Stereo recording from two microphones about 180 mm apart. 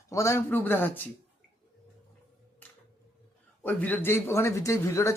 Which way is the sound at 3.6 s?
10° left (ahead or behind).